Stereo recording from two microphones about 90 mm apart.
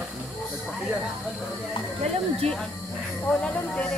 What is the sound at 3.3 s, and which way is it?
Speech, 15° left (ahead or behind).